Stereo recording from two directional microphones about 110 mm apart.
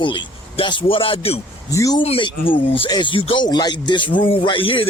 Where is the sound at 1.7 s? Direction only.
30° left (ahead or behind).